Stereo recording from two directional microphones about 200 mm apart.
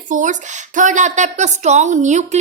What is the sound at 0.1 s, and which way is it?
A woman's voice, 40° right (ahead or behind).